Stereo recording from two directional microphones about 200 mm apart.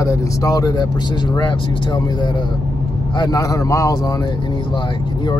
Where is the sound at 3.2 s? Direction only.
15° left (ahead or behind).